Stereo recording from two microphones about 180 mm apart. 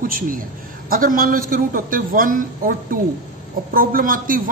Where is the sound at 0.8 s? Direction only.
50° right (ahead or behind).